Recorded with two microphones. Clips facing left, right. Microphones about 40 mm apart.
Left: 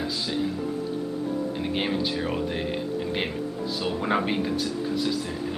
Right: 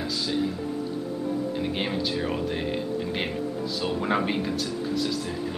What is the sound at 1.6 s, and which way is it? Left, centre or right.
Speech, centre.